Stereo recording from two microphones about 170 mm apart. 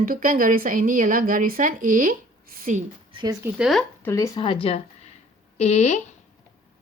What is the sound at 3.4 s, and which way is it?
Speech, 5° right (ahead or behind).